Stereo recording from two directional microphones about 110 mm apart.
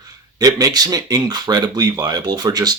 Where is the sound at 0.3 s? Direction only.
35° right (ahead or behind).